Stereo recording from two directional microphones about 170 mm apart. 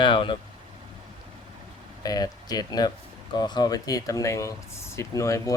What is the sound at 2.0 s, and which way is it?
Speech, 20° left (ahead or behind).